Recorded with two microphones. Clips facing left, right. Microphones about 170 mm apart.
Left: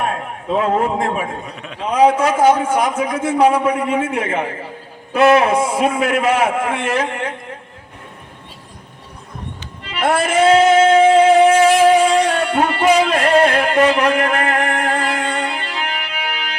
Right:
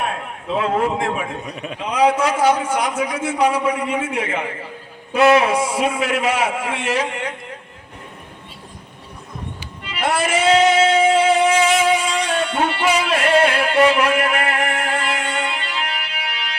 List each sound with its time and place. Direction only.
0.0 s a man's voice: 45° left (ahead or behind)
1.5 s a man's voice: 15° right (ahead or behind)
1.9 s a man's voice: 50° left (ahead or behind)
9.9 s music: 55° left (ahead or behind)
12.8 s music: 40° left (ahead or behind)